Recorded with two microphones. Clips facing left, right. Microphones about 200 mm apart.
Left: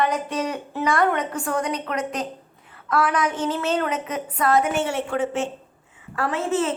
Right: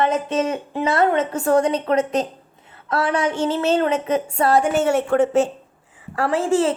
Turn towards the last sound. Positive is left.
turn(degrees=-30)  # may be behind; listen again after turning